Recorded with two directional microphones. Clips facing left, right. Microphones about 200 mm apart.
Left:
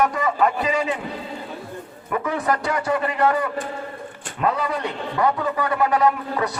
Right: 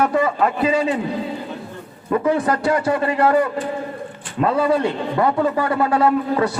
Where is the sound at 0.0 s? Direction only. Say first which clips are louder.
Right 2 dB; 30° right (ahead or behind).